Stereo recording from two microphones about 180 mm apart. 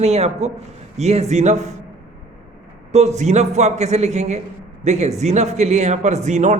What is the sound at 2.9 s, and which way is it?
A man's voice, 40° right (ahead or behind).